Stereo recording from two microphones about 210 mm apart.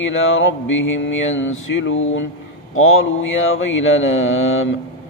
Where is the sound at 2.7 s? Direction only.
80° left.